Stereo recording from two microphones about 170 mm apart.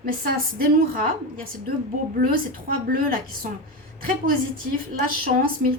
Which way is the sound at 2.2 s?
55° right (ahead or behind).